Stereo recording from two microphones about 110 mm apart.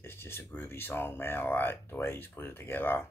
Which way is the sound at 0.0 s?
20° left (ahead or behind).